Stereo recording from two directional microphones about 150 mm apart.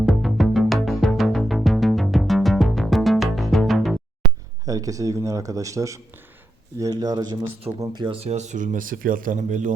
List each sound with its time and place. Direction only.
0.0 s music: centre (ahead or behind)
4.6 s a man's voice: 25° right (ahead or behind); by 9.7 s 55° right (ahead or behind)